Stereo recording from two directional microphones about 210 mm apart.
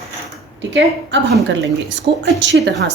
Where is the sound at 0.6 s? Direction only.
55° right (ahead or behind).